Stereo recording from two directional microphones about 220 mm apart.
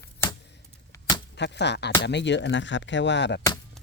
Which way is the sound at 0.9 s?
15° left (ahead or behind).